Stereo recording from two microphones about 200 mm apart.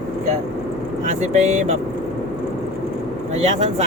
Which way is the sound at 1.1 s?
35° right (ahead or behind).